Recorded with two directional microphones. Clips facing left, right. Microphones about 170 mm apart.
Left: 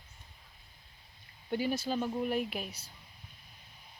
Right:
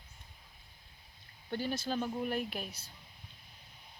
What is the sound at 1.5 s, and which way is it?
Speech, 10° left (ahead or behind).